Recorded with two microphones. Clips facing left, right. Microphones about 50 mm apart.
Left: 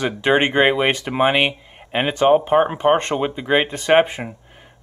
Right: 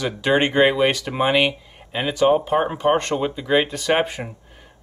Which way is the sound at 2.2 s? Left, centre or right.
Left.